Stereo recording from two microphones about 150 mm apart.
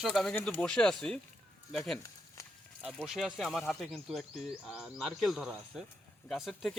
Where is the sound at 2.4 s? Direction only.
20° left (ahead or behind).